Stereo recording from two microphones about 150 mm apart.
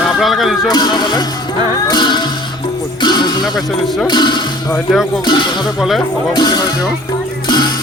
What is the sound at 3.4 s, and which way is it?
Speech, centre (ahead or behind).